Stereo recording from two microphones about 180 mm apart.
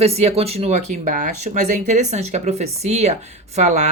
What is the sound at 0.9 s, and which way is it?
A woman's voice, 45° right (ahead or behind).